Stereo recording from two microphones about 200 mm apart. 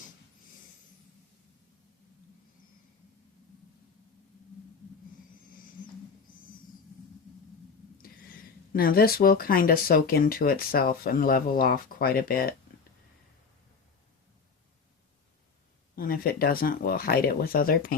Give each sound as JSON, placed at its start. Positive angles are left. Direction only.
{"t": 8.7, "sound": "speech", "side_deg": 50}
{"t": 16.0, "sound": "speech", "side_deg": 45}